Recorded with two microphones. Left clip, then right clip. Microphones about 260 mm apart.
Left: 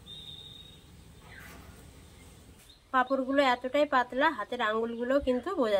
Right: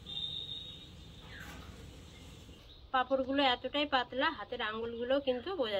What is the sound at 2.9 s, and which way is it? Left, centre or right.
A woman's voice, left.